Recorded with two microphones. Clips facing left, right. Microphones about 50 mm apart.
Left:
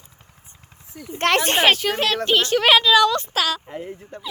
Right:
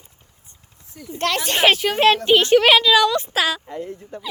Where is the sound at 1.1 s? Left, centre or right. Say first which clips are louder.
Left 3 dB; left.